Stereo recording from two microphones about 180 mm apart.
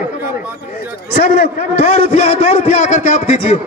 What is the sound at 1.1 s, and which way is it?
A man's voice, 40° left (ahead or behind).